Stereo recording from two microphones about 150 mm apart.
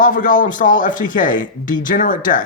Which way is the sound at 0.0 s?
65° left (ahead or behind).